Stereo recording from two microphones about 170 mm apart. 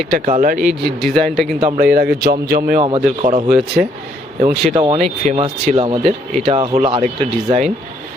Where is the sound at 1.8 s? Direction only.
60° right (ahead or behind).